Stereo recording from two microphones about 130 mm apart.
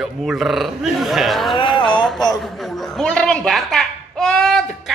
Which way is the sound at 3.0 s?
5° left (ahead or behind).